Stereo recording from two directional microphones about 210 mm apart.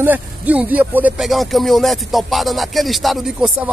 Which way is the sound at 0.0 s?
10° right (ahead or behind).